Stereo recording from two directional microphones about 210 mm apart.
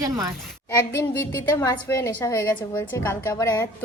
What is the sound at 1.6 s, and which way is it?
A woman's voice, 10° left (ahead or behind).